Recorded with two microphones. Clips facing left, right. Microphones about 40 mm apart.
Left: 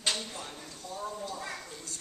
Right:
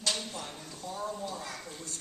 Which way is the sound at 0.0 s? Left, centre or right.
Left.